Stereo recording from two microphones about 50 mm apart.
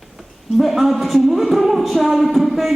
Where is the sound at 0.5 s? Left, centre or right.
Centre.